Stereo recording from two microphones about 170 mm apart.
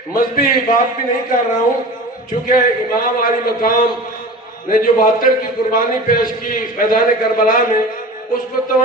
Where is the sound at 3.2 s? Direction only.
55° left (ahead or behind).